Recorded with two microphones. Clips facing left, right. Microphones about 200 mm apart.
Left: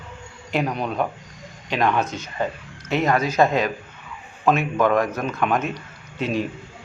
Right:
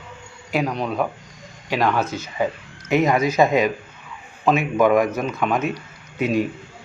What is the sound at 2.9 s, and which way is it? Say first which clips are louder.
A man's voice: right 3 dB; 10° right (ahead or behind).